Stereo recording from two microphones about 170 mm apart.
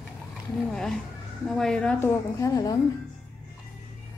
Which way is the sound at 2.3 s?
20° left (ahead or behind).